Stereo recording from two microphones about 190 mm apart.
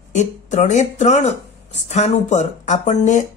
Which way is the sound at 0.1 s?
40° left (ahead or behind).